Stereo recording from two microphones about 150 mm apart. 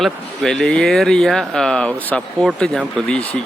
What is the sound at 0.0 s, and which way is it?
Speech, 5° left (ahead or behind).